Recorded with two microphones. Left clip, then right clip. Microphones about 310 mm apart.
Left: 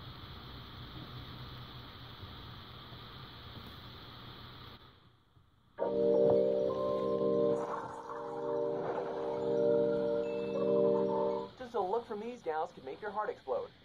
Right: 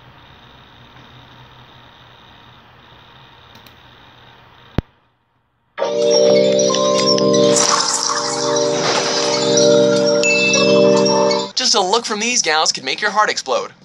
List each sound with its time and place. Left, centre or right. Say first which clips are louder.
5.8 s organ: right 15 dB; right
6.7 s music: right 18 dB; right